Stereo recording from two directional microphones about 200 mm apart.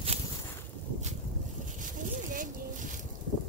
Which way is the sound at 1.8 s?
40° right (ahead or behind).